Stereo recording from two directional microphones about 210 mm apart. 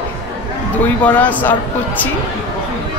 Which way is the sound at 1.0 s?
5° left (ahead or behind).